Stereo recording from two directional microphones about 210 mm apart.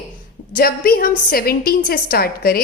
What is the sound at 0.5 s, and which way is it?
A woman's voice, 45° left (ahead or behind).